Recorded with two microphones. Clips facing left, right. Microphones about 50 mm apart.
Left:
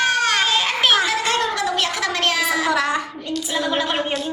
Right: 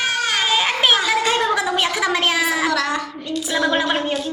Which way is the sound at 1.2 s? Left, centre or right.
Centre.